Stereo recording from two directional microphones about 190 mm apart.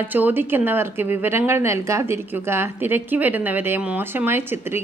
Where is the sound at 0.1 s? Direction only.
10° right (ahead or behind).